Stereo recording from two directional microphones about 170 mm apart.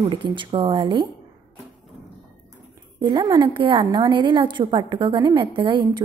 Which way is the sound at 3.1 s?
25° right (ahead or behind).